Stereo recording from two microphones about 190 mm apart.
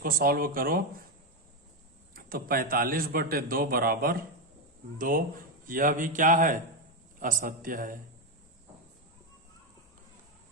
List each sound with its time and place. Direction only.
0.0 s a man's voice: 50° right (ahead or behind)
2.1 s a man's voice: 50° right (ahead or behind)